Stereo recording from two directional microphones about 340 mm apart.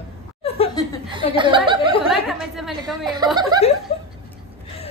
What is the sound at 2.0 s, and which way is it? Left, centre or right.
A woman's voice, centre.